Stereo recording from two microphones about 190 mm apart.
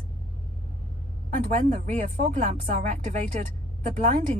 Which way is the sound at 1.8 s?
40° right (ahead or behind).